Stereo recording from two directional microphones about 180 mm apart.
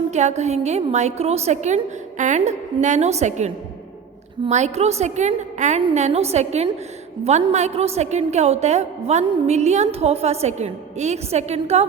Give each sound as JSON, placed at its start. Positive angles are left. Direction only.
{"t": 0.1, "sound": "a woman's voice", "side_deg": -40}